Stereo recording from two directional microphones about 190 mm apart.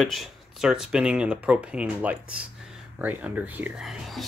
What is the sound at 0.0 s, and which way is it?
Speech, centre (ahead or behind).